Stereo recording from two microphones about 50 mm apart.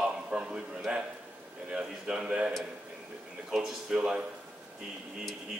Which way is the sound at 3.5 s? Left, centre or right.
Centre.